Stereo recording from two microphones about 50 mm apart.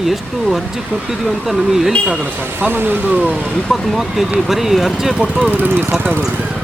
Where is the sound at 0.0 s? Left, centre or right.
Centre.